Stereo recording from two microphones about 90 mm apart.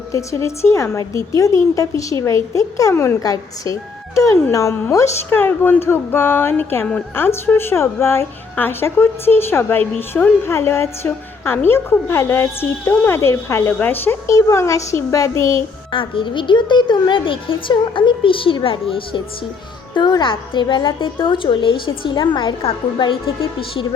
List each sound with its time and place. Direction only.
0.1 s speech: 35° left (ahead or behind)
2.9 s a woman's voice: 25° left (ahead or behind)
3.2 s a woman's voice: 40° left (ahead or behind)
5.3 s a woman's voice: 20° left (ahead or behind)
13.7 s a woman's voice: 20° left (ahead or behind)
14.3 s speech: 35° left (ahead or behind)
15.9 s a woman's voice: 70° left (ahead or behind)
19.9 s a woman's voice: 55° left (ahead or behind); by 23.8 s 75° left (ahead or behind)